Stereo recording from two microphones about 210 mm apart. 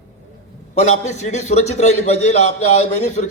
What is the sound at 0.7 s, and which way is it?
A man's voice, 35° left (ahead or behind).